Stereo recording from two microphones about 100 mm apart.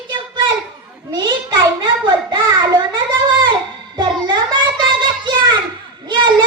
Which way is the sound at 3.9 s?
50° right (ahead or behind).